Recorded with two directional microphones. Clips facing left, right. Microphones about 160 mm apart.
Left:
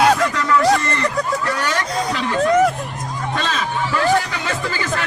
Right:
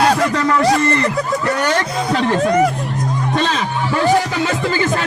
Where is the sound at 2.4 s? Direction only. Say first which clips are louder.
Left 2 dB; centre (ahead or behind).